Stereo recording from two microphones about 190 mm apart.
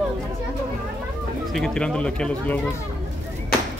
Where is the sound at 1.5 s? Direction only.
5° left (ahead or behind).